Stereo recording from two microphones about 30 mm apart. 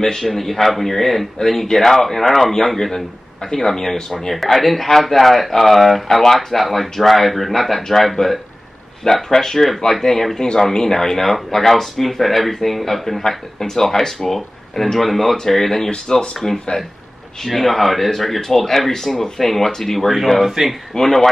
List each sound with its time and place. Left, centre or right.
0.0 s speech: centre
6.0 s speech: centre
17.4 s speech: centre
20.3 s speech: centre
21.0 s speech: centre